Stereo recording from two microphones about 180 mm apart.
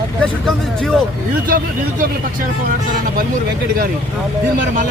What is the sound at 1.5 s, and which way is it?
Speech, 50° right (ahead or behind).